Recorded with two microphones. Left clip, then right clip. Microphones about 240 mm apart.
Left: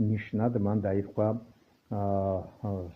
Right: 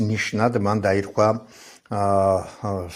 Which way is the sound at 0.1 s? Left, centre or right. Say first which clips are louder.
Right 10 dB; centre.